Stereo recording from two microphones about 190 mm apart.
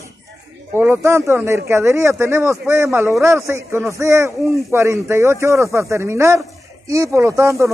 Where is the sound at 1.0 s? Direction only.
15° right (ahead or behind).